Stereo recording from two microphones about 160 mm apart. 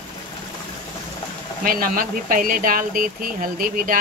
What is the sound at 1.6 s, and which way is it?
Speech, 60° right (ahead or behind).